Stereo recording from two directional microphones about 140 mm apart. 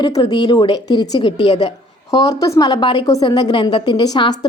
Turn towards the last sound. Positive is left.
turn(degrees=30)  # may be behind; listen again after turning